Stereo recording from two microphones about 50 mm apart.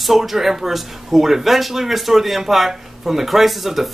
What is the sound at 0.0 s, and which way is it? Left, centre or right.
Speech, centre.